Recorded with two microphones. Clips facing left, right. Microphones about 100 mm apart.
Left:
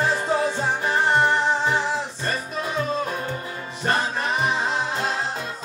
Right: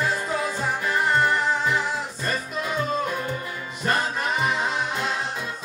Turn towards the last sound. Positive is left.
turn(degrees=30)  # may be behind; listen again after turning